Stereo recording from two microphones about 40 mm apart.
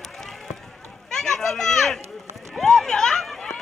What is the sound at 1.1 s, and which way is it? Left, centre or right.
Children playing, centre.